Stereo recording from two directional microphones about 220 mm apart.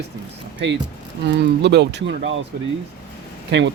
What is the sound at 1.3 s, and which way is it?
Speech, 50° right (ahead or behind).